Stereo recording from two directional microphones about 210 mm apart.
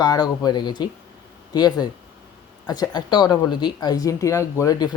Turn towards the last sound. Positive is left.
turn(degrees=20)  # may be behind; listen again after turning